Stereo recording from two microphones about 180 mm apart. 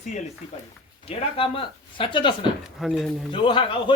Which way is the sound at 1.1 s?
30° left (ahead or behind).